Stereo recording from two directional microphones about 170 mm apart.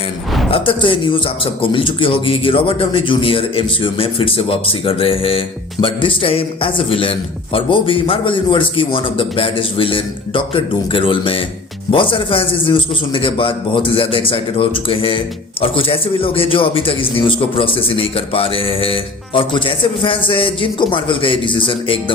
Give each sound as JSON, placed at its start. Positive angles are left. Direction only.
{"t": 0.5, "sound": "a man's voice", "side_deg": 30}